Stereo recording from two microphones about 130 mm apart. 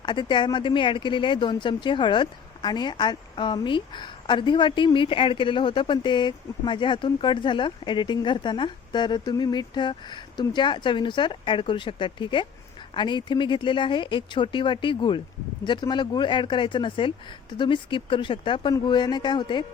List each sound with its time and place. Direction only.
0.0 s speech: 35° left (ahead or behind)